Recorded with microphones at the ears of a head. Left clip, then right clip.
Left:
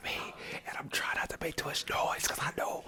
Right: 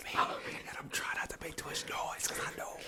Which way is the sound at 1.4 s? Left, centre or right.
Left.